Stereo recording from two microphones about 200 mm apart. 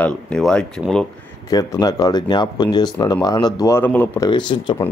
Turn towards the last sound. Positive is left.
turn(degrees=25)  # may be behind; listen again after turning